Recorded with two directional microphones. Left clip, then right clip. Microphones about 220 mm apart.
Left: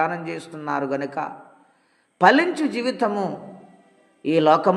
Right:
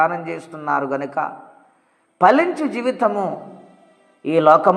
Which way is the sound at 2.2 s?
20° left (ahead or behind).